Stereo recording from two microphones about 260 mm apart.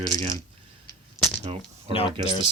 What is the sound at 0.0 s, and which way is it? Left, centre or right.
Speech, centre.